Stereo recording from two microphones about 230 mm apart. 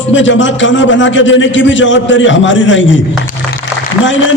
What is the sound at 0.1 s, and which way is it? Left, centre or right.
A man's voice, left.